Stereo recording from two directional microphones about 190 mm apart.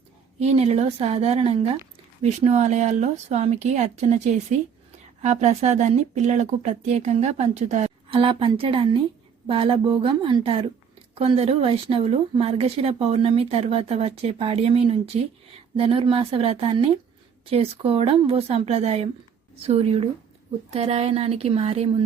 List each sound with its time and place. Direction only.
0.3 s a woman's voice: 35° right (ahead or behind)